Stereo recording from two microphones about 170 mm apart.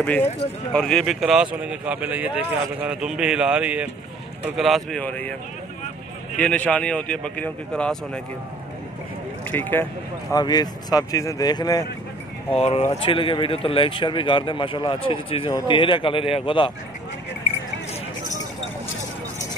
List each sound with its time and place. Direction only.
0.0 s a man's voice: 10° left (ahead or behind)
6.3 s speech: 10° left (ahead or behind)
9.5 s speech: 10° left (ahead or behind)
10.3 s speech: 25° left (ahead or behind)
12.5 s speech: 35° left (ahead or behind)